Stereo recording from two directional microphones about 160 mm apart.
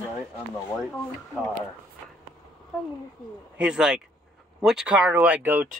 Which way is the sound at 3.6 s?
5° right (ahead or behind).